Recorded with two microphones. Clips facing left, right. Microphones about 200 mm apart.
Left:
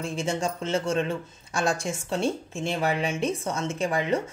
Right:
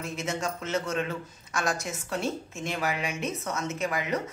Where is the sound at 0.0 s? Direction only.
30° left (ahead or behind).